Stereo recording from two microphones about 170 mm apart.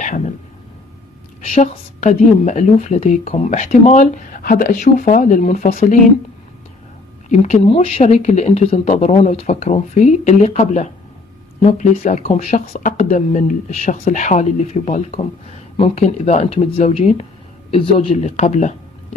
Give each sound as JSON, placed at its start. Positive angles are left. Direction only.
{"t": 0.0, "sound": "speech", "side_deg": 45}
{"t": 1.4, "sound": "speech", "side_deg": 40}
{"t": 7.2, "sound": "speech", "side_deg": 40}